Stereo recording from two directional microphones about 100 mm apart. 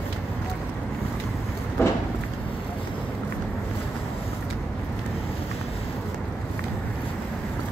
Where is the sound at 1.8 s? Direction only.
25° left (ahead or behind).